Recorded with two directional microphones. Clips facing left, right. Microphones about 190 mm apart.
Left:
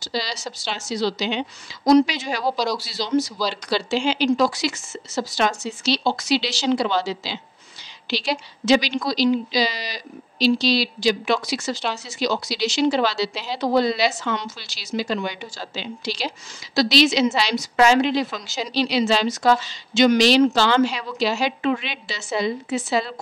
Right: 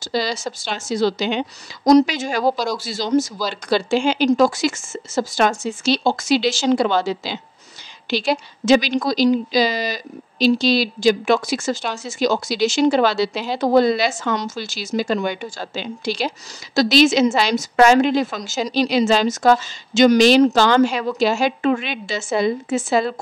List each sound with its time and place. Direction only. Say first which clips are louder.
0.0 s speech: right 6 dB; 50° right (ahead or behind)